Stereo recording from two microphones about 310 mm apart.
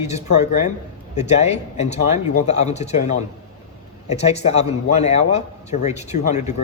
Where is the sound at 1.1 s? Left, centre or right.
Left.